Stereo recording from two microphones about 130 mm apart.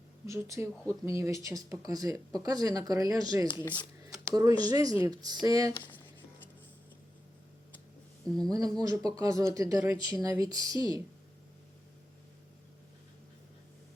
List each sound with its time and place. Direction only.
0.3 s speech: 25° right (ahead or behind)
8.4 s speech: 25° right (ahead or behind)